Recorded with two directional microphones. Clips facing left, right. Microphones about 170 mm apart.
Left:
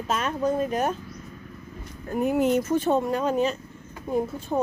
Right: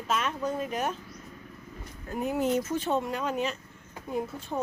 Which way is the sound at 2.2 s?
65° left (ahead or behind).